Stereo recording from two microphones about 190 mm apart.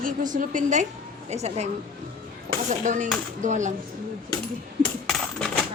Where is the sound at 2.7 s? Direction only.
40° right (ahead or behind).